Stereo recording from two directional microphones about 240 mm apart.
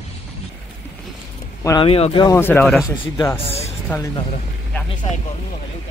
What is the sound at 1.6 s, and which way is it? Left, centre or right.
Speech, left.